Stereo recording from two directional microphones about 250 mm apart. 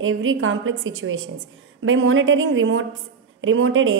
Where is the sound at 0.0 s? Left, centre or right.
Right.